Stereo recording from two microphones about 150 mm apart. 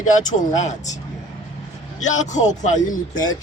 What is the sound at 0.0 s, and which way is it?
Speech, 55° left (ahead or behind).